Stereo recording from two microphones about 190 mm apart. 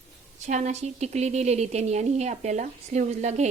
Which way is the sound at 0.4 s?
35° right (ahead or behind).